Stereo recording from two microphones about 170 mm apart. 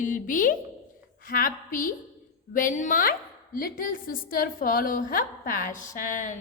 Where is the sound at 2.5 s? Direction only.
50° left (ahead or behind).